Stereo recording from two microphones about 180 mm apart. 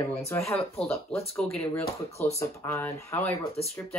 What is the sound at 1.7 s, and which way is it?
Speech, 15° left (ahead or behind).